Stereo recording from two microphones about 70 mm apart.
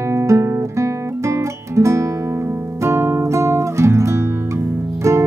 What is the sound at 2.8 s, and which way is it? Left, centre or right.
Music, right.